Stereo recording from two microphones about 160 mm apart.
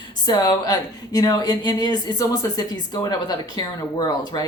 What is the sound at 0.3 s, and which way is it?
A woman's voice, 25° left (ahead or behind).